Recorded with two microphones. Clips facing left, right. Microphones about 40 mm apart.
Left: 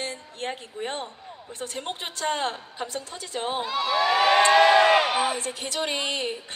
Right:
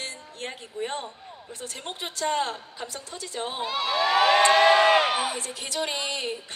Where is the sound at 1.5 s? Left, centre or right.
Left.